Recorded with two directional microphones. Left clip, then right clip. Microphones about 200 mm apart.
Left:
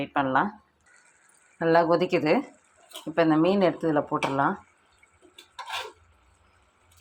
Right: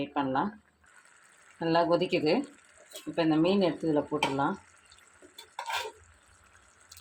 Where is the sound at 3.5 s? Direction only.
5° left (ahead or behind).